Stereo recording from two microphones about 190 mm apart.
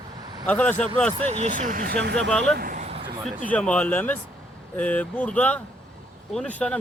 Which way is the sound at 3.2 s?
5° left (ahead or behind).